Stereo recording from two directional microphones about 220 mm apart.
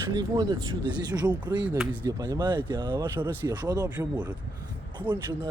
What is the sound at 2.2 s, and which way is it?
Speech, 20° right (ahead or behind).